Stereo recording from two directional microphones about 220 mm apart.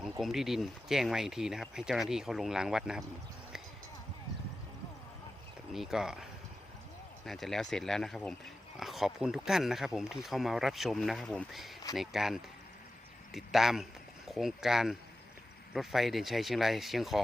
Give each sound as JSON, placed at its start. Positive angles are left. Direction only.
{"t": 0.0, "sound": "speech", "side_deg": 0}
{"t": 5.7, "sound": "speech", "side_deg": 0}
{"t": 7.3, "sound": "speech", "side_deg": 0}